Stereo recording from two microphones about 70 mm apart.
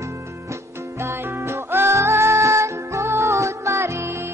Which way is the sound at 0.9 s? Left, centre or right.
Right.